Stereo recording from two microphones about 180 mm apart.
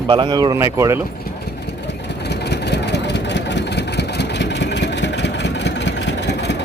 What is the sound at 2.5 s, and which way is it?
Vehicle, 70° left (ahead or behind).